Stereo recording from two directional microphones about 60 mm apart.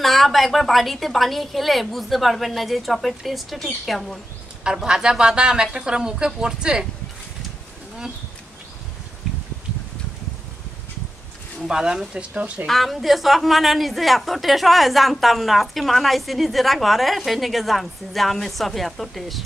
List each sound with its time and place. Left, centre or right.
0.0 s a woman's voice: centre
4.6 s speech: centre
11.6 s speech: centre
12.4 s speech: right
12.6 s a woman's voice: centre